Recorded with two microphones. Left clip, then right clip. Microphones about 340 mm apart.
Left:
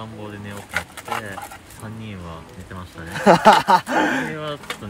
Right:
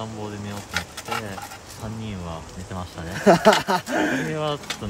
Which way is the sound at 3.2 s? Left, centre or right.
Centre.